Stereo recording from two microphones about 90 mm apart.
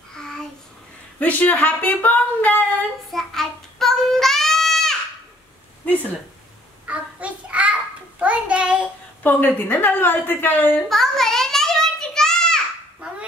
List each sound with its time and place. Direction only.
0.1 s child singing: 5° left (ahead or behind)
1.2 s speech: 15° left (ahead or behind)
3.1 s child singing: 5° left (ahead or behind)
6.9 s child singing: 15° right (ahead or behind)
9.2 s a woman's voice: 20° left (ahead or behind)
10.9 s a sound: 5° left (ahead or behind)
13.0 s duck: 10° right (ahead or behind)